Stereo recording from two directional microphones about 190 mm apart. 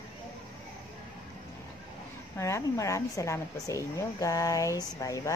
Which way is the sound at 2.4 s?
15° left (ahead or behind).